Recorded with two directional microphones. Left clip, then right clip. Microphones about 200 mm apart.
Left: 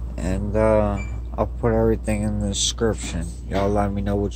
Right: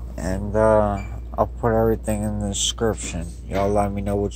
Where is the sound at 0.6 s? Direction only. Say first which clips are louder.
Right 2 dB; centre (ahead or behind).